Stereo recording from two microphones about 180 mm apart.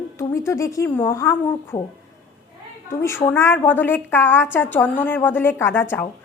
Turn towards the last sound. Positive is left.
turn(degrees=10)  # may be behind; listen again after turning